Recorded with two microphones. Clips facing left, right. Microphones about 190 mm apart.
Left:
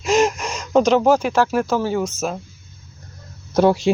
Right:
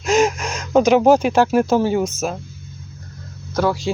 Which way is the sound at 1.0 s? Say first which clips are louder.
Right 3 dB; 20° right (ahead or behind).